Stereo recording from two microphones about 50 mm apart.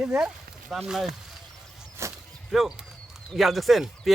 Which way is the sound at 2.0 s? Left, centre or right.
Right.